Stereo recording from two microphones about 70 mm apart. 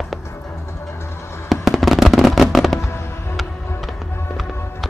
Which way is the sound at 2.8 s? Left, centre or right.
Left.